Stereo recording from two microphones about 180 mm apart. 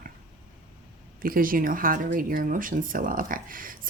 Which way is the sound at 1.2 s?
50° right (ahead or behind).